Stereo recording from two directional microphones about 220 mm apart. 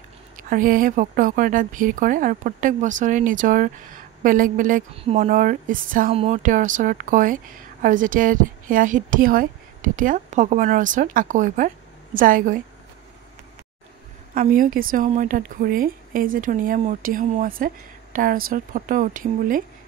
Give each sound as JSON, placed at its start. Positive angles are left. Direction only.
{"t": 0.4, "sound": "a woman's voice", "side_deg": -40}
{"t": 14.3, "sound": "a woman's voice", "side_deg": -40}